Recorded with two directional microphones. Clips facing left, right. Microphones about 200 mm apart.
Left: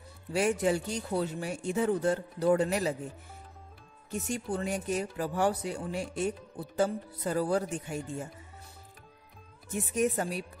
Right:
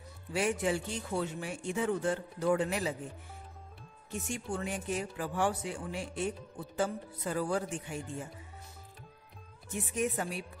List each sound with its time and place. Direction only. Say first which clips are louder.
0.3 s a man's voice: left 4 dB; 40° left (ahead or behind)
4.3 s a man's voice: left 4 dB; 35° left (ahead or behind)
9.9 s a man's voice: left 4 dB; 40° left (ahead or behind)